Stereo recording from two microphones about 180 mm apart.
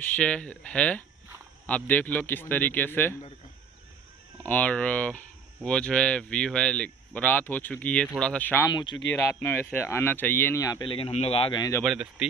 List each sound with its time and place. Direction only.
0.1 s speech: 5° left (ahead or behind)
4.4 s speech: 10° left (ahead or behind)
8.6 s speech: 25° left (ahead or behind)
9.1 s speech: 15° left (ahead or behind)
11.8 s speech: centre (ahead or behind)